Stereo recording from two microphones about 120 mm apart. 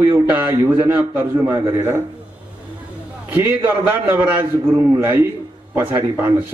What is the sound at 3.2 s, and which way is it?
A man's voice, 15° right (ahead or behind).